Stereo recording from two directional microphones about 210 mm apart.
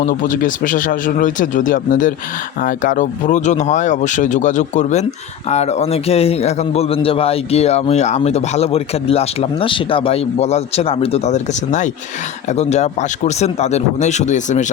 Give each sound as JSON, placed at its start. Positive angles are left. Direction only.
{"t": 0.0, "sound": "a man's voice", "side_deg": 40}